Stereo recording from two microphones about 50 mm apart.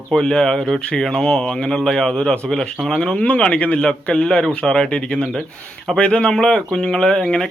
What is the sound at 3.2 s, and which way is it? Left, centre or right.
A man's voice, left.